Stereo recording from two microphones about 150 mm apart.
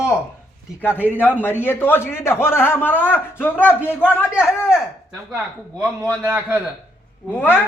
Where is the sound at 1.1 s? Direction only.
10° left (ahead or behind).